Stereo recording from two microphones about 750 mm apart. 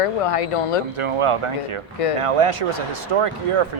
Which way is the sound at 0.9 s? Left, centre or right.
Right.